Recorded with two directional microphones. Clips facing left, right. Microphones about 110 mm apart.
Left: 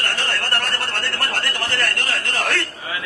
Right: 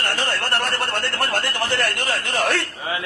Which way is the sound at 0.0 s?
15° right (ahead or behind).